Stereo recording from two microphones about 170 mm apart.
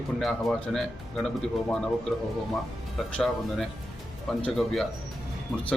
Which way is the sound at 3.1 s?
Centre (ahead or behind).